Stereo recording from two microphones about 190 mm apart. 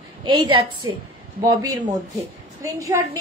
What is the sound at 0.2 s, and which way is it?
Speech, 25° right (ahead or behind).